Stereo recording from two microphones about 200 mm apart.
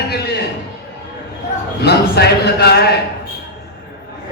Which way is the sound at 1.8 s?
55° left (ahead or behind).